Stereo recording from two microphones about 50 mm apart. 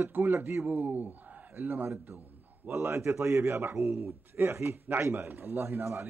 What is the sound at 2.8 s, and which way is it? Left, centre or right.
A man's voice, right.